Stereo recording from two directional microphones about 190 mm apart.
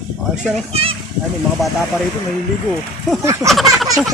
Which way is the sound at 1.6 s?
Centre (ahead or behind).